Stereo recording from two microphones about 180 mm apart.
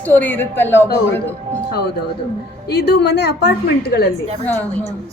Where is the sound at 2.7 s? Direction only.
65° left (ahead or behind).